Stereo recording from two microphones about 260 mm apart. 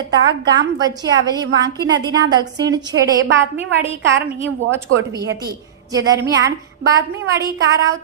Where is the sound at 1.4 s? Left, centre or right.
Right.